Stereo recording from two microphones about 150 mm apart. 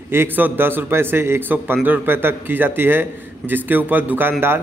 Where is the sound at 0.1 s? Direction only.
15° right (ahead or behind).